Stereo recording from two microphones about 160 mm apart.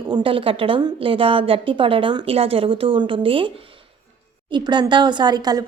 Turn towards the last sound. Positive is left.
turn(degrees=-25)  # may be behind; listen again after turning